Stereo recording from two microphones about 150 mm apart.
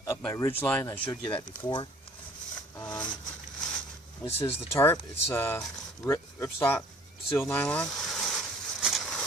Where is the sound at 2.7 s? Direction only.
25° left (ahead or behind).